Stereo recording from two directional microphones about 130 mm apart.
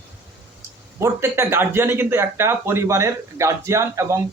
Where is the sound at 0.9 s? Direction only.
20° right (ahead or behind).